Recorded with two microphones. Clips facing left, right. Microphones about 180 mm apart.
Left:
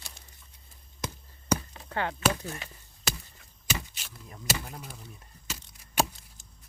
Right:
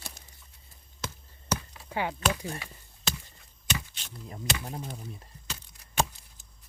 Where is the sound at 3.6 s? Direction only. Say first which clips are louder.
Even; 5° left (ahead or behind).